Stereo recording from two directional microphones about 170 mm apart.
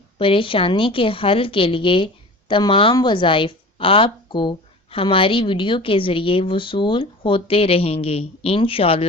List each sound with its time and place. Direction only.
0.2 s a woman's voice: 30° left (ahead or behind)